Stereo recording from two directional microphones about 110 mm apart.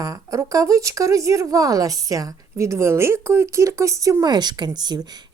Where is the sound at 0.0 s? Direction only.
30° right (ahead or behind).